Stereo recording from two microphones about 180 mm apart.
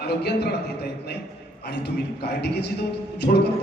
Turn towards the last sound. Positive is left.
turn(degrees=45)  # may be behind; listen again after turning